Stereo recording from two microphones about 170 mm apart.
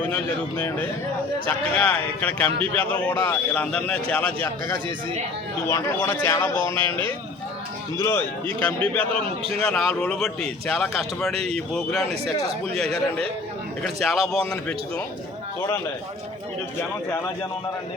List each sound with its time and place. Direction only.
0.1 s a man's voice: 10° left (ahead or behind)
5.6 s a man's voice: 15° left (ahead or behind)
7.9 s a man's voice: 15° left (ahead or behind)